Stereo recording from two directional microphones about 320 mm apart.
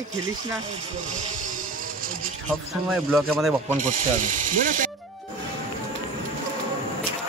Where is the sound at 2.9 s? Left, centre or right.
Centre.